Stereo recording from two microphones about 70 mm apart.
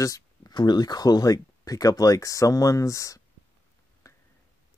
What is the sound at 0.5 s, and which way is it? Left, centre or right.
Speech, left.